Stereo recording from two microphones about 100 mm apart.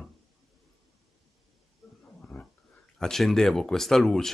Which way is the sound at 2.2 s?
10° left (ahead or behind).